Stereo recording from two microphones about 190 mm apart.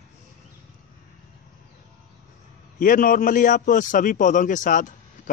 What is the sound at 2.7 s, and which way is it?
A man's voice, 45° left (ahead or behind).